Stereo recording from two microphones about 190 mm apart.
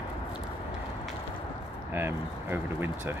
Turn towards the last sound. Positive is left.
turn(degrees=-10)  # may be behind; listen again after turning